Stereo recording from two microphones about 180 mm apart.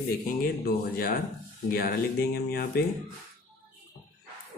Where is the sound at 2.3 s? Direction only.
60° left (ahead or behind).